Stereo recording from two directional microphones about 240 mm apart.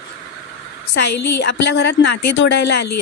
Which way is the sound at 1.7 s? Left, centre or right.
Left.